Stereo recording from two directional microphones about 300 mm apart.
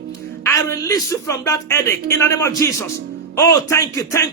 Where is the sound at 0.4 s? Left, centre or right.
Centre.